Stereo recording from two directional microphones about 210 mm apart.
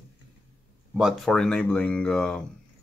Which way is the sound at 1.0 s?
Centre (ahead or behind).